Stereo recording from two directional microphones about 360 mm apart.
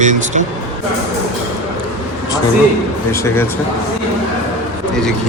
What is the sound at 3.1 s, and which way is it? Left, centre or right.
Speech, centre.